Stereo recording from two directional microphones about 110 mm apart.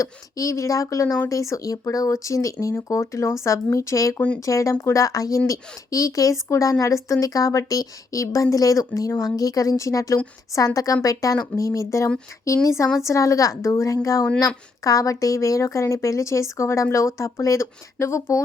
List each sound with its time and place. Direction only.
0.0 s a woman's voice: 30° left (ahead or behind)